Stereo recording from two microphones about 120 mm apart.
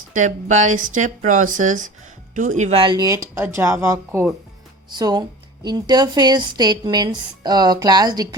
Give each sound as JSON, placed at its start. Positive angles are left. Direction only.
{"t": 0.1, "sound": "speech", "side_deg": -90}
{"t": 2.7, "sound": "a woman's voice", "side_deg": -40}
{"t": 3.1, "sound": "speech", "side_deg": -25}
{"t": 4.9, "sound": "a woman's voice", "side_deg": -35}